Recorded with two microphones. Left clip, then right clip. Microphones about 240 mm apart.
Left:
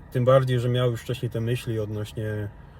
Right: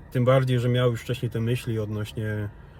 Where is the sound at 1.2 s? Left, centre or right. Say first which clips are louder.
Left 1 dB; centre.